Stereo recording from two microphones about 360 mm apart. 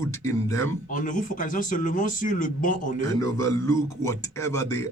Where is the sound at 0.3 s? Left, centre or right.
Centre.